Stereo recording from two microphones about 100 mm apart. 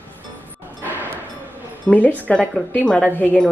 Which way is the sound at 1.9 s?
15° left (ahead or behind).